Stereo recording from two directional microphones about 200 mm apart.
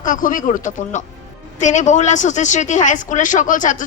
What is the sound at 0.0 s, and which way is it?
A woman's voice, 40° left (ahead or behind).